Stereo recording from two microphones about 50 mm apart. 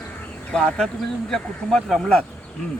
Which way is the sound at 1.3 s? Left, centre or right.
Centre.